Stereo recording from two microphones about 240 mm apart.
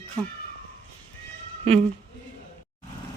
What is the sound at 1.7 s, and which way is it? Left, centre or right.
Speech, right.